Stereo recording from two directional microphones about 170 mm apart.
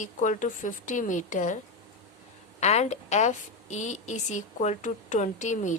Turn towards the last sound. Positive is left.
turn(degrees=45)  # may be behind; listen again after turning